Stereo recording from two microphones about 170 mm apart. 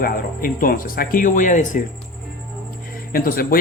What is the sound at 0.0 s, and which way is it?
Speech, 60° left (ahead or behind).